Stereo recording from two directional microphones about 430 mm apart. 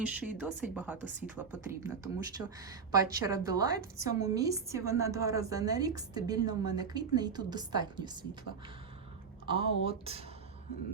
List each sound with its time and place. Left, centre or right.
0.0 s a woman's voice: centre
8.5 s speech: left
9.5 s a woman's voice: centre